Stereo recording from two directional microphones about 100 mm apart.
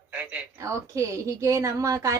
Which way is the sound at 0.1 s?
15° right (ahead or behind).